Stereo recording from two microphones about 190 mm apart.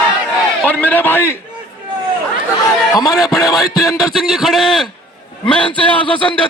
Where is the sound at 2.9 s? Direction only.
20° left (ahead or behind).